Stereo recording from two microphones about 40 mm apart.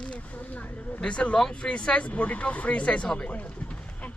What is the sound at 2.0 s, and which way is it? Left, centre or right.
Speech, left.